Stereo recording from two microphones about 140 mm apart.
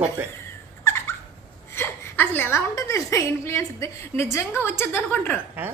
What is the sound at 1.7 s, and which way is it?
A woman's voice, 15° left (ahead or behind).